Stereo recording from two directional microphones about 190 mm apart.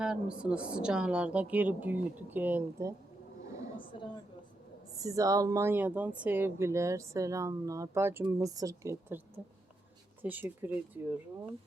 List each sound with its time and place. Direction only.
0.0 s speech: 5° right (ahead or behind)
4.9 s speech: 15° right (ahead or behind)